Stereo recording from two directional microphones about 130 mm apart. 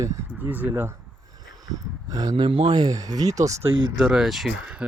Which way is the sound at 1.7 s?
30° right (ahead or behind).